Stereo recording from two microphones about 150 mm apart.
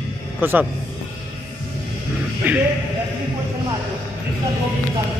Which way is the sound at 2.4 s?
15° right (ahead or behind).